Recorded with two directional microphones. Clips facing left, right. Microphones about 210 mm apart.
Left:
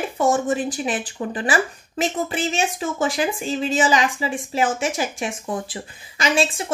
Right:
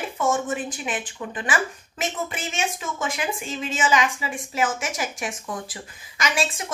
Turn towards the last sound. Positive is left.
turn(degrees=30)  # may be behind; listen again after turning